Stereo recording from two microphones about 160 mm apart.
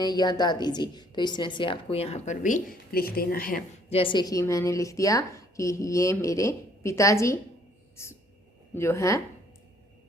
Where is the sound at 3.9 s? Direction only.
35° left (ahead or behind).